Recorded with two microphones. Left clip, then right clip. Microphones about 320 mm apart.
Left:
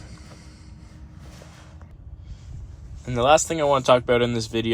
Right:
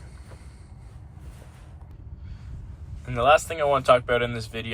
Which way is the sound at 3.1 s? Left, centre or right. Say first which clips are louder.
Left 1 dB; centre.